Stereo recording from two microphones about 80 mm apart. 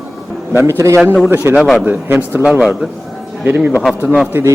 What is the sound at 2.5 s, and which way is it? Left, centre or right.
A man's voice, centre.